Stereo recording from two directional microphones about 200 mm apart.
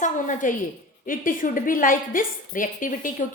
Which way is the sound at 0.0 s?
40° left (ahead or behind).